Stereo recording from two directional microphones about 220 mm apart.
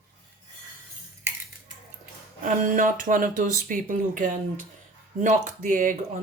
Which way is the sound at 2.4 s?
40° right (ahead or behind).